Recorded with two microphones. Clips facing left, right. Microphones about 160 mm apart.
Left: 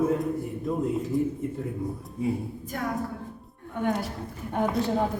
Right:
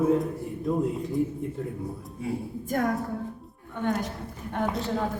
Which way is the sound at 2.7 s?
50° right (ahead or behind).